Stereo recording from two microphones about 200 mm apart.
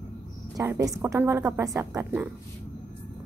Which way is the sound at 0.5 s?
15° right (ahead or behind).